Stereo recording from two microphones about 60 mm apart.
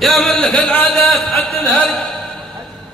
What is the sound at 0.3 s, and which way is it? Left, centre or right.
Speech, centre.